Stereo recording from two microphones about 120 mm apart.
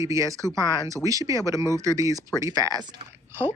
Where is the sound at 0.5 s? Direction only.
35° left (ahead or behind).